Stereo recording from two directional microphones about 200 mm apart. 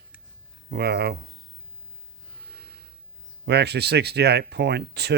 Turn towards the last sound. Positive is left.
turn(degrees=-55)  # may be behind; listen again after turning